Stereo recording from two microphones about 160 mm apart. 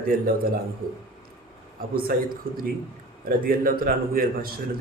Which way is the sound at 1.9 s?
70° right (ahead or behind).